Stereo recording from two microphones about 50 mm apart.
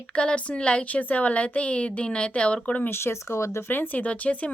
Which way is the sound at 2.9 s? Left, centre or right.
Left.